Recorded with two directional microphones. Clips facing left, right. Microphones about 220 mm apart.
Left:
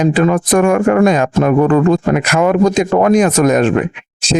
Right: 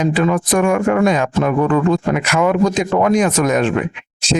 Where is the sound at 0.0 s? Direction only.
45° left (ahead or behind).